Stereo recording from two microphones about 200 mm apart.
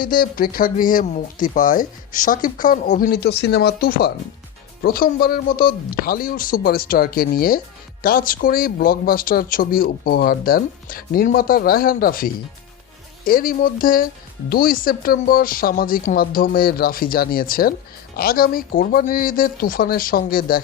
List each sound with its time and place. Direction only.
0.0 s speech: 45° left (ahead or behind)